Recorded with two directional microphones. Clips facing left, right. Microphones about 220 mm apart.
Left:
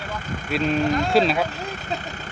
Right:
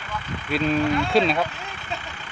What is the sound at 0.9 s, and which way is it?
Speech, 40° left (ahead or behind).